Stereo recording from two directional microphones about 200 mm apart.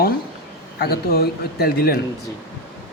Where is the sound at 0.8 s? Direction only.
50° left (ahead or behind).